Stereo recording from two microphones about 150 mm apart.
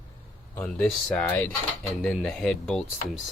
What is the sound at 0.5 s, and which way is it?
Speech, 10° left (ahead or behind).